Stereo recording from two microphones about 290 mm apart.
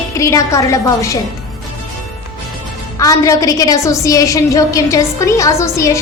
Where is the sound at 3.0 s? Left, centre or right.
Centre.